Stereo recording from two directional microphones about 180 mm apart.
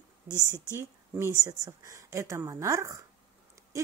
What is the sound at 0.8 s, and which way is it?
A woman's voice, 15° right (ahead or behind).